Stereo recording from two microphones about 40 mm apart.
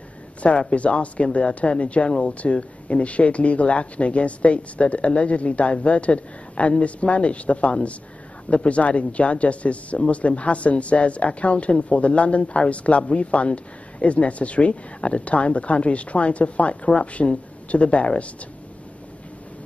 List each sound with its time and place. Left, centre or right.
0.4 s speech: left